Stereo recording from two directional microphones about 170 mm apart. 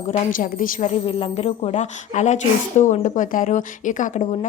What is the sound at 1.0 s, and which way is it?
A woman's voice, 35° left (ahead or behind).